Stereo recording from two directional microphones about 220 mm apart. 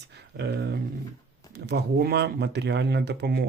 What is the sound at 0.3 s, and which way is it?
Speech, 50° right (ahead or behind).